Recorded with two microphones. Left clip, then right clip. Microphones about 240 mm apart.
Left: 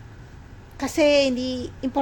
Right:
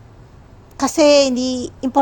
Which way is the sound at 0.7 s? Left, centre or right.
Right.